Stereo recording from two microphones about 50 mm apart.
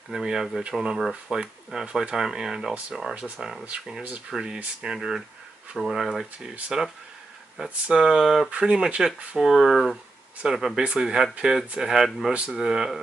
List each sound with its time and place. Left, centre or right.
0.1 s speech: centre
8.5 s speech: right
9.4 s speech: centre
12.3 s speech: right
12.5 s speech: centre